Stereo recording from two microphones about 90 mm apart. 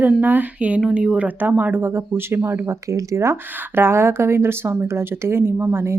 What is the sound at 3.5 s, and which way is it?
Speech, 25° right (ahead or behind).